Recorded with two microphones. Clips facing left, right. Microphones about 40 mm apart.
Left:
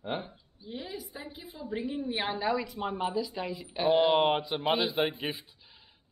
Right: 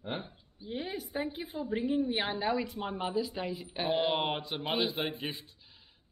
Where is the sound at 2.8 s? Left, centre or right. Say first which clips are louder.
Left 3 dB; centre.